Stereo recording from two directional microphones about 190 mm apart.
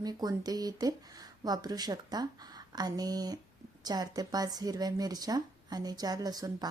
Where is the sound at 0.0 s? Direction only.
20° right (ahead or behind).